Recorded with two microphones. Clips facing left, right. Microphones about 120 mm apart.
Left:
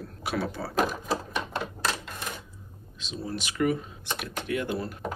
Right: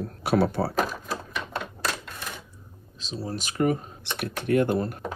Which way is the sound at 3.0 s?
35° right (ahead or behind).